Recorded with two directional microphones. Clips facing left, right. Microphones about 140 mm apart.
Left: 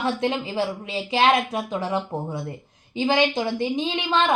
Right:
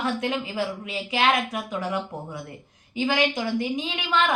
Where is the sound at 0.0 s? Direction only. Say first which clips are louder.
Left 2 dB; 30° left (ahead or behind).